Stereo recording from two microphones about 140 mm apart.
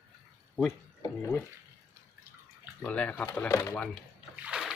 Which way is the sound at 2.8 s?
10° left (ahead or behind).